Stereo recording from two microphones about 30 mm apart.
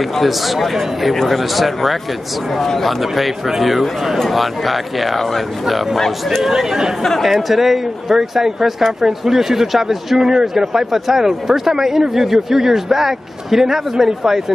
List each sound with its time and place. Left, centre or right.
0.1 s a man's voice: centre
6.5 s speech: right
7.0 s speech: centre
7.2 s speech: centre